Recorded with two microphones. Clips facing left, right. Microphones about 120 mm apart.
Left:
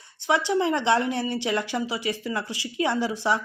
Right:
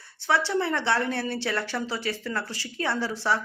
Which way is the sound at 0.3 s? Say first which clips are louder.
Left 2 dB; 15° left (ahead or behind).